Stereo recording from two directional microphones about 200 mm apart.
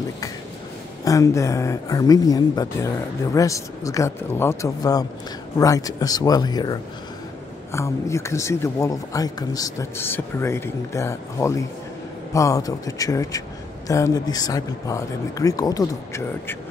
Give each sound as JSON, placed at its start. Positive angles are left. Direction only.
{"t": 1.0, "sound": "speech", "side_deg": 15}